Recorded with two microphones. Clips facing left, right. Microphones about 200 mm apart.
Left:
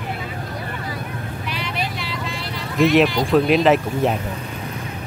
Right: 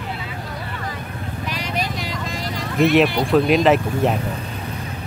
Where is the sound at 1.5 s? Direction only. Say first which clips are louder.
Right 2 dB; 40° right (ahead or behind).